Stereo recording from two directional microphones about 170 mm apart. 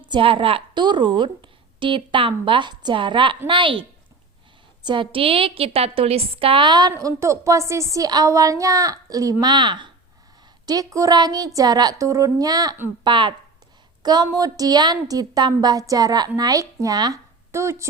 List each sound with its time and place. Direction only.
0.1 s a woman's voice: 30° right (ahead or behind)
4.9 s a woman's voice: 30° right (ahead or behind)